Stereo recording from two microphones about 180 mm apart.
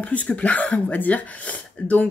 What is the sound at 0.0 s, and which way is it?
Speech, 10° left (ahead or behind).